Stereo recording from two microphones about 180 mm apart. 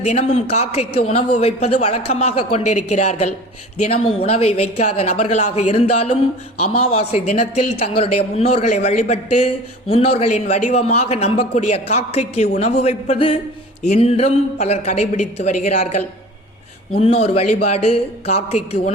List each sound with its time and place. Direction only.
0.0 s a man's voice: 35° left (ahead or behind)